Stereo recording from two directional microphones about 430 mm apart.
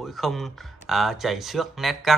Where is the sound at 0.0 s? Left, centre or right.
Centre.